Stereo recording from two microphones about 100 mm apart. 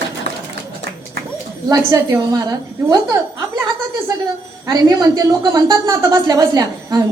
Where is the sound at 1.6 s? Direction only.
35° right (ahead or behind).